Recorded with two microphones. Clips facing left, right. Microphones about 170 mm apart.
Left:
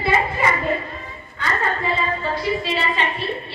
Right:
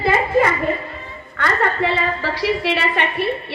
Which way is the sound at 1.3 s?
70° right (ahead or behind).